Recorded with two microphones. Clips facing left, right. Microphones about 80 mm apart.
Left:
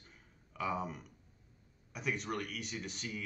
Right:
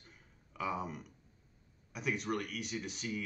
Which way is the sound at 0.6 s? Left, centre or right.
Centre.